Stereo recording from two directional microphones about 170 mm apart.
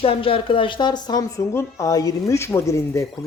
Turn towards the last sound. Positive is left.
turn(degrees=15)  # may be behind; listen again after turning